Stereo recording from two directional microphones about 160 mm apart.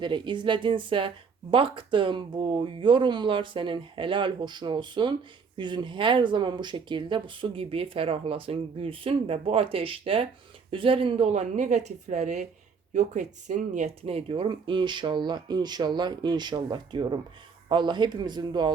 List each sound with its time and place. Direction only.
0.0 s speech: 30° right (ahead or behind)